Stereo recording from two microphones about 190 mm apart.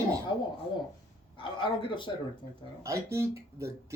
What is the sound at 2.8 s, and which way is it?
Speech, 15° right (ahead or behind).